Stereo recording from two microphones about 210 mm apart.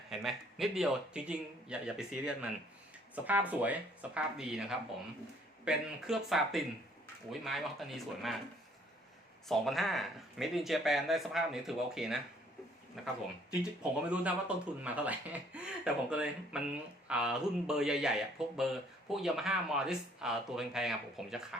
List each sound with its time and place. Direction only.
0.1 s speech: centre (ahead or behind)
9.5 s speech: centre (ahead or behind)